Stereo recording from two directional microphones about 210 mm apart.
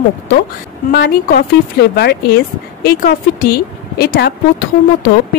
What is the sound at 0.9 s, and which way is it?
Speech, 50° left (ahead or behind).